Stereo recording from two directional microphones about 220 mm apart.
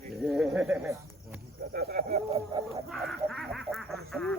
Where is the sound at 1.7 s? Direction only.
45° right (ahead or behind).